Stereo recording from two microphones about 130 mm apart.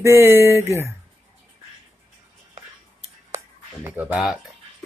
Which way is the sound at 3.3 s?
15° right (ahead or behind).